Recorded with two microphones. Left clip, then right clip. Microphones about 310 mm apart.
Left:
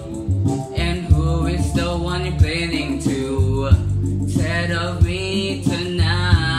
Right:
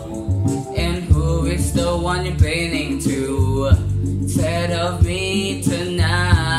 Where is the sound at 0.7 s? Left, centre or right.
Centre.